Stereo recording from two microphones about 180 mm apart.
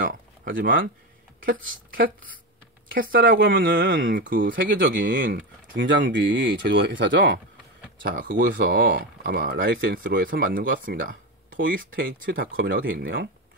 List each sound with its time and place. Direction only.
0.0 s a sound: 50° right (ahead or behind)
1.4 s speech: 50° right (ahead or behind)
3.5 s speech: 90° right
3.8 s speech: 50° right (ahead or behind)
4.6 s speech: 90° right
5.2 s speech: 80° right
8.1 s speech: 50° right (ahead or behind)